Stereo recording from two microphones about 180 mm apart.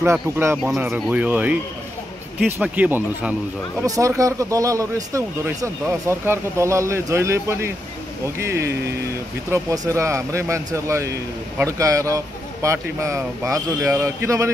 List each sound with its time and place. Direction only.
0.0 s speech: 15° right (ahead or behind)
3.8 s speech: 20° right (ahead or behind)